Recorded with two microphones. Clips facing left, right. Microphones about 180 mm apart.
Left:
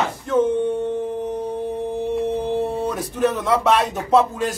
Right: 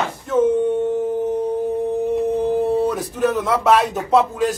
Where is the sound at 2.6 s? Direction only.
Centre (ahead or behind).